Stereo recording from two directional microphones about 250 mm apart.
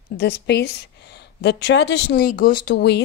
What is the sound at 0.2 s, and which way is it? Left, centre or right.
Speech, left.